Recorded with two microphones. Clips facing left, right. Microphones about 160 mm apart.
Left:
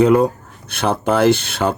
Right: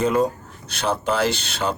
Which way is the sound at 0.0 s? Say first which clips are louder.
Left 7 dB; 65° left (ahead or behind).